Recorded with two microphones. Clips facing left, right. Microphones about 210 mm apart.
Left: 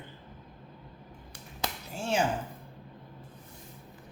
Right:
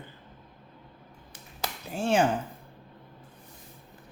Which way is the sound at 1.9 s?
55° right (ahead or behind).